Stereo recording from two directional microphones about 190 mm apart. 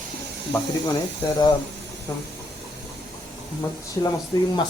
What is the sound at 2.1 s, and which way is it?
Speech, 20° left (ahead or behind).